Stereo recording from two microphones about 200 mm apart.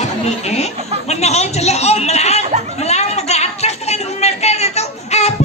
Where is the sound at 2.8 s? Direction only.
35° left (ahead or behind).